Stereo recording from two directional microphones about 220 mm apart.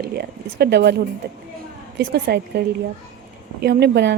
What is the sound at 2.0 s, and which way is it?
Speech, 50° right (ahead or behind).